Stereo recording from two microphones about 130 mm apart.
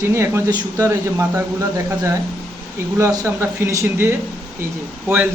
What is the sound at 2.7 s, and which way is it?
A man's voice, 25° right (ahead or behind).